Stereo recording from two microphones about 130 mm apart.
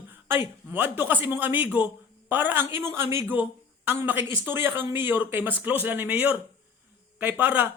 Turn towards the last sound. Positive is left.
turn(degrees=-15)  # may be behind; listen again after turning